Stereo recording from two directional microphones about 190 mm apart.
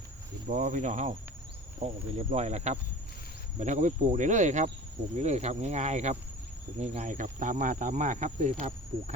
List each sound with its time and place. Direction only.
0.4 s speech: 40° right (ahead or behind)